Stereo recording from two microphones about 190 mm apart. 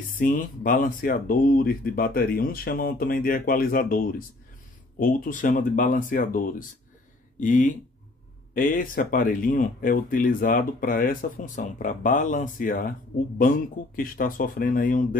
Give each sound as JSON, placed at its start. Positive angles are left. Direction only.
{"t": 0.2, "sound": "speech", "side_deg": 45}